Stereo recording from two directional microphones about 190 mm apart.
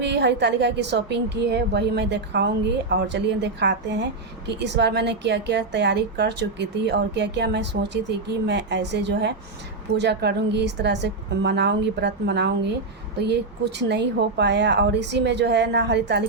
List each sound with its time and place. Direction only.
0.0 s a woman's voice: 65° right (ahead or behind)